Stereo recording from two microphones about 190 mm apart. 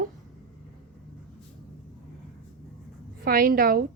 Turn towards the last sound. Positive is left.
turn(degrees=-50)  # may be behind; listen again after turning